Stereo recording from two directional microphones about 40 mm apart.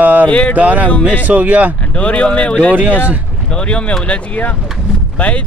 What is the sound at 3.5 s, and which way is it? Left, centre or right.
Speech, left.